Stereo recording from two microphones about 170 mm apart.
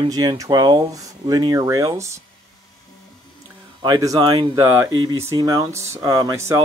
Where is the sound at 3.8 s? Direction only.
25° right (ahead or behind).